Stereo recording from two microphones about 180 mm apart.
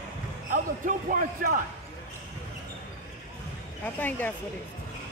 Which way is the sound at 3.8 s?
10° left (ahead or behind).